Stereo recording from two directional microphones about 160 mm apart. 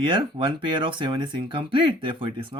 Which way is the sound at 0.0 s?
30° right (ahead or behind).